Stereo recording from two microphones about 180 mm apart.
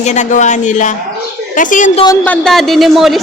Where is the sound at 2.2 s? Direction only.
5° left (ahead or behind).